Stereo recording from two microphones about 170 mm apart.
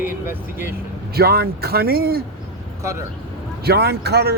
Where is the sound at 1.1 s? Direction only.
65° right (ahead or behind).